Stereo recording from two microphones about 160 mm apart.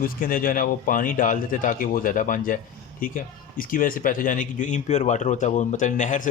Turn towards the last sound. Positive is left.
turn(degrees=50)  # may be behind; listen again after turning